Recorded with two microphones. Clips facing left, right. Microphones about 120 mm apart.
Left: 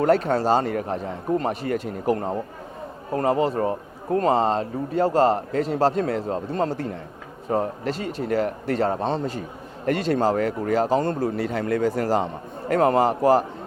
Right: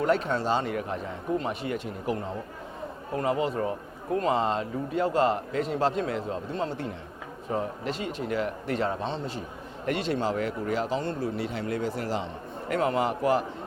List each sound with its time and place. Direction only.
0.0 s a man's voice: 40° left (ahead or behind)